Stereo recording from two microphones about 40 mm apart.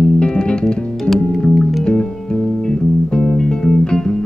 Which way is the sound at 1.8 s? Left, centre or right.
Left.